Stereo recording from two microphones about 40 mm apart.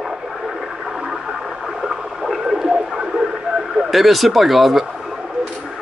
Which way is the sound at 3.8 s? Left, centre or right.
Centre.